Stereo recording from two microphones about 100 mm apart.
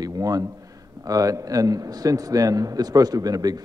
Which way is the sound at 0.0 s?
40° right (ahead or behind).